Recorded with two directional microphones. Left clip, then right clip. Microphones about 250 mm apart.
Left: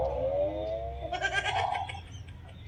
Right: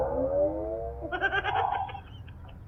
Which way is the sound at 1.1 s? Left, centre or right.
Right.